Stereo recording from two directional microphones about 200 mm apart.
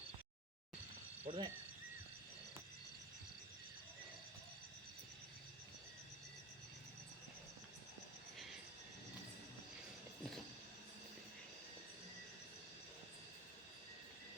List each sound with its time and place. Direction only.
1.2 s speech: 25° right (ahead or behind)